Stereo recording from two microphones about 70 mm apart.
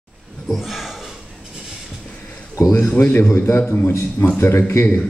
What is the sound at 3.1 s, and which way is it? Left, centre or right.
Speech, left.